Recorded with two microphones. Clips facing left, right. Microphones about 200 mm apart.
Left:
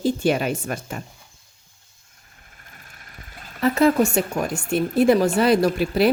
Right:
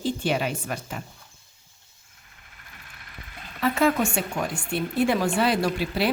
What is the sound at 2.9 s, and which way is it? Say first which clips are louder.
Vehicle: right 1 dB; 40° left (ahead or behind).